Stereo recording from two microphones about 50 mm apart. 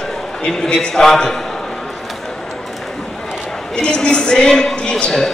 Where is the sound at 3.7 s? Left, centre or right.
Centre.